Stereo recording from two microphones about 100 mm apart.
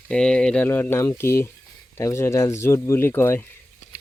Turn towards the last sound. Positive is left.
turn(degrees=25)  # may be behind; listen again after turning